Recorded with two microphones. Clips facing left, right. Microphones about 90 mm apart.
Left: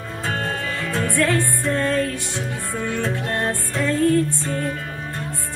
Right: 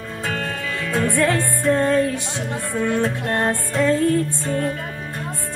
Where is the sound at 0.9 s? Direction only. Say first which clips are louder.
Right 2 dB; 20° right (ahead or behind).